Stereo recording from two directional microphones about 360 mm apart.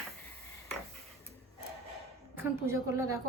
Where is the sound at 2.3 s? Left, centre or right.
Centre.